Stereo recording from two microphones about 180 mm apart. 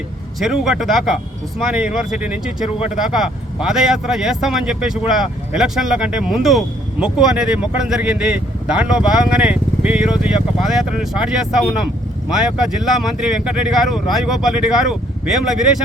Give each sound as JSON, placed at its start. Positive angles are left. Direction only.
{"t": 0.3, "sound": "speech", "side_deg": 0}
{"t": 2.7, "sound": "speech", "side_deg": 35}
{"t": 3.0, "sound": "speech", "side_deg": -5}